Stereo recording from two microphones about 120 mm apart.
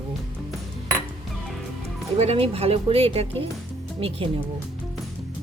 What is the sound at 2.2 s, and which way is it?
Speech, 55° right (ahead or behind).